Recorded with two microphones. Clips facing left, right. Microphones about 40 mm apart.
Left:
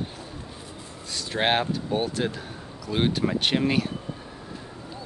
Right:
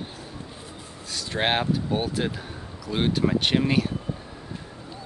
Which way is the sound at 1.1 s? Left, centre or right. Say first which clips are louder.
Left 1 dB; centre.